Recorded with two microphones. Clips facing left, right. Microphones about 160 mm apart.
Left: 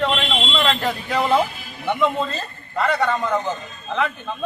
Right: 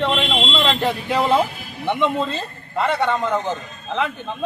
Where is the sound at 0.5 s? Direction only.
30° right (ahead or behind).